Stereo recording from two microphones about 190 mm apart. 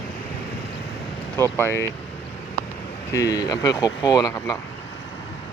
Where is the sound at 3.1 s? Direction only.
20° left (ahead or behind).